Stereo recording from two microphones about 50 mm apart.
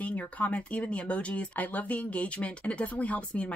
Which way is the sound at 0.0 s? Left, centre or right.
Left.